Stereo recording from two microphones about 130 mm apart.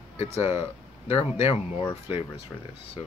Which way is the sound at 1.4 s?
40° left (ahead or behind).